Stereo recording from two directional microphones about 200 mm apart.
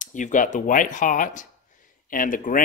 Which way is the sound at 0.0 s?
40° left (ahead or behind).